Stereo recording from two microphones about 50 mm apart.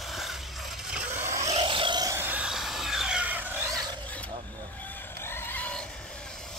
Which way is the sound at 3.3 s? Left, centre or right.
Right.